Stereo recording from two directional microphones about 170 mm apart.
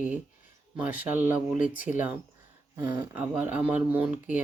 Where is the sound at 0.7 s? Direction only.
10° right (ahead or behind).